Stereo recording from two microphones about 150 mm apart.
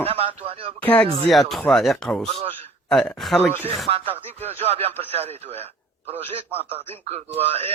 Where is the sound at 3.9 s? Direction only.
40° right (ahead or behind).